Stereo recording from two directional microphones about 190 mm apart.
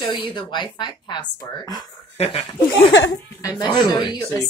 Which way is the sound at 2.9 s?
70° left (ahead or behind).